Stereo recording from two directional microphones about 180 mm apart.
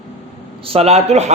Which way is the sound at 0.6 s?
35° right (ahead or behind).